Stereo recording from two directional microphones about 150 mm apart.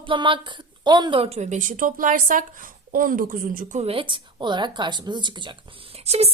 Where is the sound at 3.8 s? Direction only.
35° right (ahead or behind).